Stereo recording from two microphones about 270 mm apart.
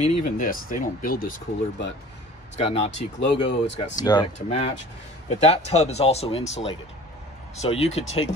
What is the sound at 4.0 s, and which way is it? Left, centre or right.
Speech, centre.